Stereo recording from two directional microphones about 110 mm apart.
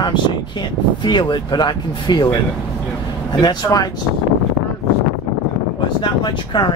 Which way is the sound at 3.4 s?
35° left (ahead or behind).